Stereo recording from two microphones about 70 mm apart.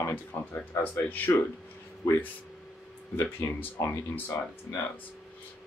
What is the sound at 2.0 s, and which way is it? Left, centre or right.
Speech, left.